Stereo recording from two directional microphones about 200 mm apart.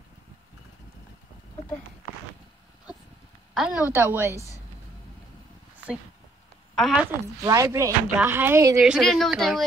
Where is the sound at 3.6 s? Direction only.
5° right (ahead or behind).